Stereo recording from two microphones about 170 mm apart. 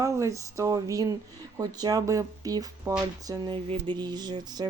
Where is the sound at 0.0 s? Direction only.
20° right (ahead or behind).